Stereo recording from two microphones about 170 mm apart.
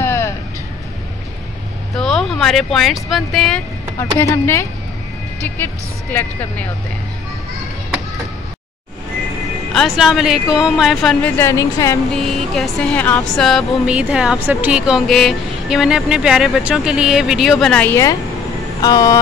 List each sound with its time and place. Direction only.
0.0 s music: 15° left (ahead or behind)
2.0 s speech: centre (ahead or behind)
4.2 s a woman's voice: 15° left (ahead or behind)
9.8 s speech: centre (ahead or behind)
11.3 s a woman's voice: 15° left (ahead or behind)
12.1 s speech: centre (ahead or behind); by 19.1 s 20° left (ahead or behind)